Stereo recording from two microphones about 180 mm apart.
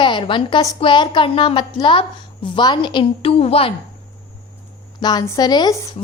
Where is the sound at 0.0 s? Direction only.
25° left (ahead or behind).